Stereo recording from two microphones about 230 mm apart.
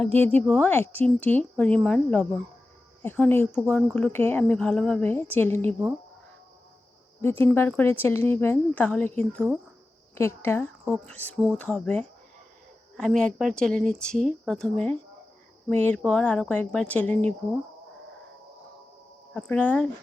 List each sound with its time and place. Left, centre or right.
0.0 s a woman's voice: right
0.3 s a woman's voice: centre
7.2 s a woman's voice: centre
19.3 s a woman's voice: centre